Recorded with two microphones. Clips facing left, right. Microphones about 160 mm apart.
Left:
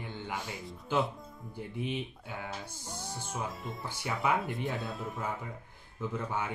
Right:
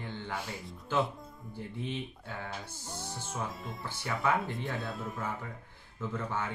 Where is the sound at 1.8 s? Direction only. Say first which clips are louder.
Left 2 dB; 15° left (ahead or behind).